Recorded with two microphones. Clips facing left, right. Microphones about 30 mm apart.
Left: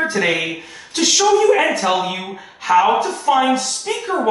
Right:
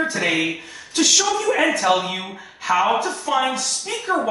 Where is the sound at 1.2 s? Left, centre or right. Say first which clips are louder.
Left 6 dB; centre.